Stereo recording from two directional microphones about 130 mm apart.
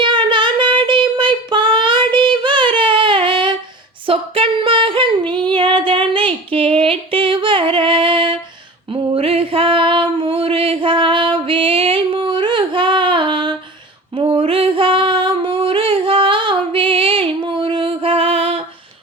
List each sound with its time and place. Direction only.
0.0 s child singing: 40° right (ahead or behind)
4.0 s female singing: 45° right (ahead or behind)
8.9 s a sound: 45° right (ahead or behind)